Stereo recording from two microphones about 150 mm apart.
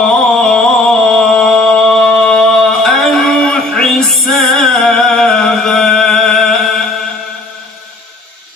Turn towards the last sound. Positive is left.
turn(degrees=5)  # may be behind; listen again after turning